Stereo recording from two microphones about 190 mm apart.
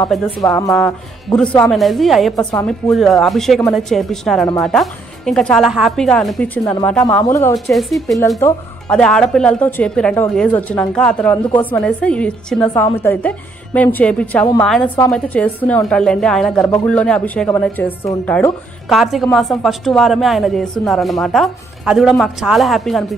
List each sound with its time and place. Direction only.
0.7 s a woman's voice: 5° left (ahead or behind)
7.7 s a woman's voice: centre (ahead or behind)
8.4 s speech: 15° left (ahead or behind)
8.9 s a woman's voice: 5° left (ahead or behind)